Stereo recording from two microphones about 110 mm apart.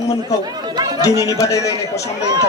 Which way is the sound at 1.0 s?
30° left (ahead or behind).